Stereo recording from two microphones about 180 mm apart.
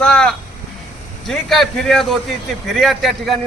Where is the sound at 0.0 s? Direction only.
5° left (ahead or behind).